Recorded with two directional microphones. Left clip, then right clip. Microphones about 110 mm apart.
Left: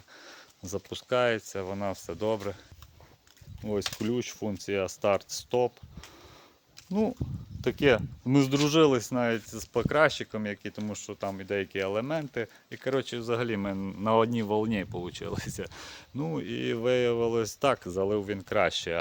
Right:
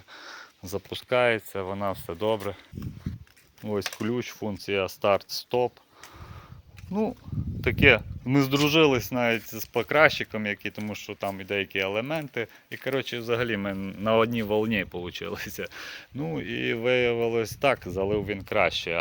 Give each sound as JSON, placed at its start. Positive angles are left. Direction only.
{"t": 0.3, "sound": "a sound", "side_deg": 35}
{"t": 0.9, "sound": "speech", "side_deg": 15}
{"t": 3.6, "sound": "speech", "side_deg": 15}
{"t": 4.0, "sound": "speech", "side_deg": 25}
{"t": 7.6, "sound": "speech", "side_deg": 25}